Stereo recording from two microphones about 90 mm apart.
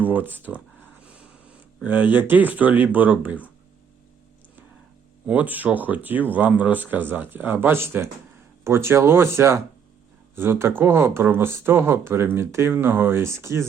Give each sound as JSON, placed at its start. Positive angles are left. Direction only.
{"t": 0.3, "sound": "speech", "side_deg": -20}
{"t": 1.8, "sound": "speech", "side_deg": -20}
{"t": 5.2, "sound": "speech", "side_deg": -15}